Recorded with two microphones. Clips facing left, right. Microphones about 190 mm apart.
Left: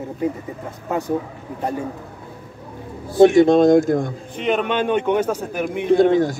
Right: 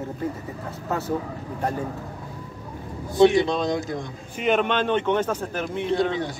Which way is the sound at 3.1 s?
50° left (ahead or behind).